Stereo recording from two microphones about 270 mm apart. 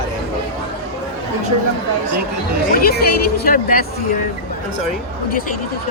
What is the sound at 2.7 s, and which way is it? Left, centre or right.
Speech, left.